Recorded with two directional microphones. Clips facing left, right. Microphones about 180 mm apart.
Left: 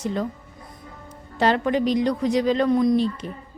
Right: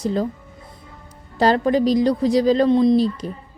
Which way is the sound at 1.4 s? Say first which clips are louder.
Right 4 dB; 35° right (ahead or behind).